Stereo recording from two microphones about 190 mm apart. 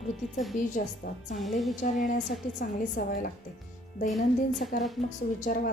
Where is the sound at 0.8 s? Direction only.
45° left (ahead or behind).